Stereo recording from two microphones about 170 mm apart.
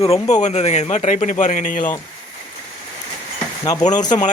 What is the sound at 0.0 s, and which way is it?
Speech, 40° left (ahead or behind).